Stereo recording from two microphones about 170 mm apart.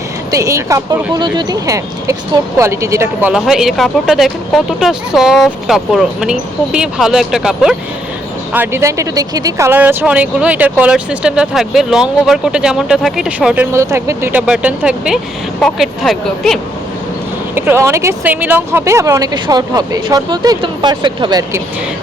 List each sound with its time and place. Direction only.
0.3 s speech: 20° right (ahead or behind)
13.7 s speech: 15° right (ahead or behind); by 16.6 s centre (ahead or behind)
17.5 s speech: 15° right (ahead or behind)